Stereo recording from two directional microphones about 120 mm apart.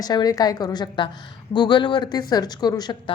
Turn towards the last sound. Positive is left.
turn(degrees=35)  # may be behind; listen again after turning